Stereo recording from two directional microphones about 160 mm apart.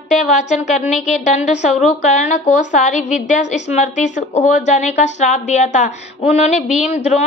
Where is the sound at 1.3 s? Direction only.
50° left (ahead or behind).